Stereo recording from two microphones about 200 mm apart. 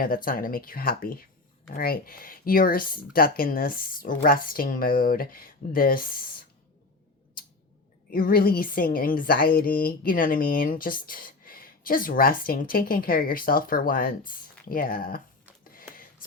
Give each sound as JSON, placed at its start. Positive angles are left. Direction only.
{"t": 0.0, "sound": "a woman's voice", "side_deg": 45}
{"t": 8.1, "sound": "a woman's voice", "side_deg": 45}
{"t": 15.6, "sound": "a sound", "side_deg": 45}